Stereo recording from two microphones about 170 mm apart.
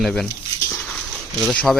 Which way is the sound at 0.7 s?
5° left (ahead or behind).